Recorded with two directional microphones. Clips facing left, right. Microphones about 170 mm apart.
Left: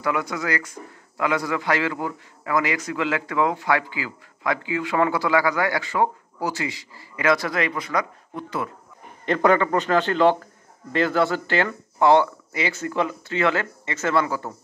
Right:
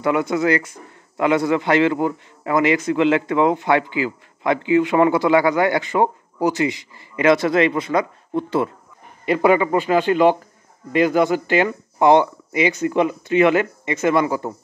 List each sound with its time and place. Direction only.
0.0 s a man's voice: 25° right (ahead or behind)
9.2 s speech: 10° right (ahead or behind)